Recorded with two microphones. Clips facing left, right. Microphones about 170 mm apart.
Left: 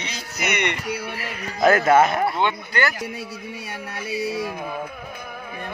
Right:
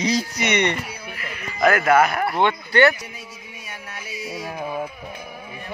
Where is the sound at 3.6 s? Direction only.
65° left (ahead or behind).